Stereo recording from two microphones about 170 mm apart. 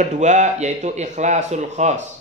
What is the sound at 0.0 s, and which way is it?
Speech, 45° right (ahead or behind).